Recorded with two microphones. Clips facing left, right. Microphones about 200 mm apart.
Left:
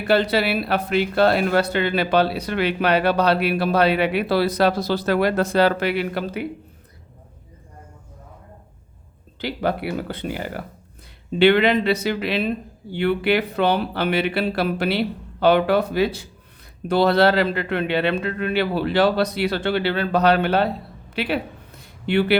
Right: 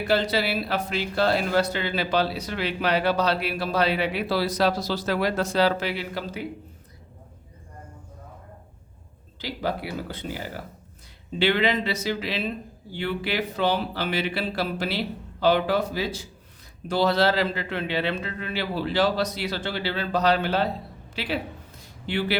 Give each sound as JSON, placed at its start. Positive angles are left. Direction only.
{"t": 0.1, "sound": "speech", "side_deg": 60}
{"t": 9.4, "sound": "speech", "side_deg": 60}
{"t": 21.2, "sound": "a sound", "side_deg": 60}